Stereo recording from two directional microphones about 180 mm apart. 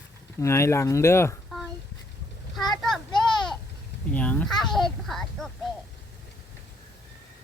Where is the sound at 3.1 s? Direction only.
25° left (ahead or behind).